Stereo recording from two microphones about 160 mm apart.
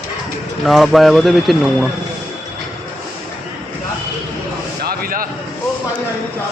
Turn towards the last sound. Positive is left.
turn(degrees=-65)  # may be behind; listen again after turning